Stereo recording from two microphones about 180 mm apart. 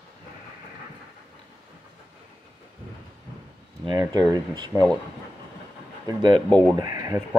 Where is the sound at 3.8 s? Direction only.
25° right (ahead or behind).